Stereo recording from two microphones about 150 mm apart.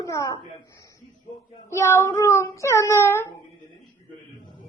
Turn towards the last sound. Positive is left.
turn(degrees=15)  # may be behind; listen again after turning